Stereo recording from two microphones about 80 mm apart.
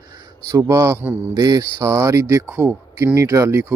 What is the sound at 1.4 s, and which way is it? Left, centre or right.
Speech, right.